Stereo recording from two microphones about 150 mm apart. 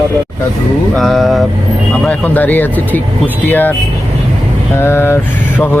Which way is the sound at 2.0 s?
10° left (ahead or behind).